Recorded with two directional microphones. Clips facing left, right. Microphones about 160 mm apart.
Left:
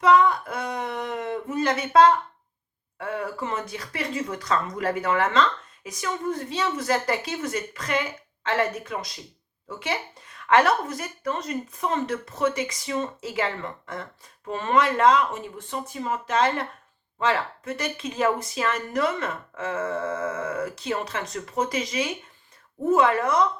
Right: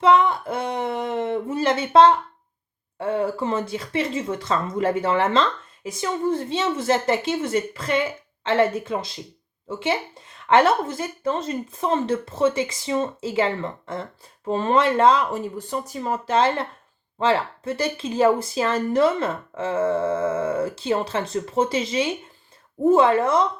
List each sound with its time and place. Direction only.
0.0 s speech: 25° right (ahead or behind)